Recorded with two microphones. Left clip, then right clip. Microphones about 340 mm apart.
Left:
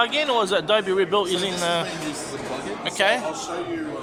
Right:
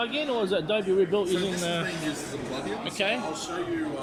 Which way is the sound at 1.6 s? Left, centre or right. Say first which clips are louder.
Left 6 dB; centre.